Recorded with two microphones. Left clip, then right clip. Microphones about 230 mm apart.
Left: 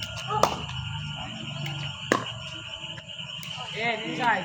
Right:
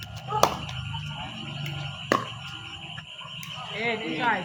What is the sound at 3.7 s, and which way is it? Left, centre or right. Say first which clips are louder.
Speech: even; left.